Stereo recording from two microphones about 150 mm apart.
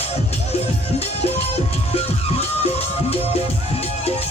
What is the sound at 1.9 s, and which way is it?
Music, 45° left (ahead or behind).